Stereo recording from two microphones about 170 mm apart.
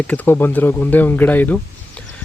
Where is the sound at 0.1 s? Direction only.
10° left (ahead or behind).